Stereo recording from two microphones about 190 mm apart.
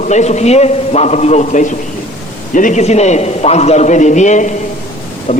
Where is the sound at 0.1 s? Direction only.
35° left (ahead or behind).